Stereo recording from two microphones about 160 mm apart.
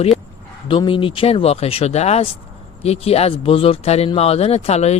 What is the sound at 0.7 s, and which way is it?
Speech, 30° left (ahead or behind).